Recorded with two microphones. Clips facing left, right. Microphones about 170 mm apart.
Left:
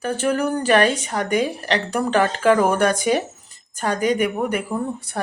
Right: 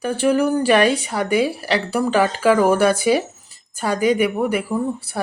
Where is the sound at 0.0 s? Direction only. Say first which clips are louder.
Right 3 dB; 10° right (ahead or behind).